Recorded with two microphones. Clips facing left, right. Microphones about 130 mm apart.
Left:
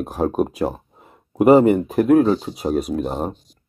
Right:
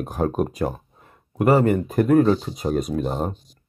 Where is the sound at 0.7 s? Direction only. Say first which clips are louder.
Left 2 dB; 20° left (ahead or behind).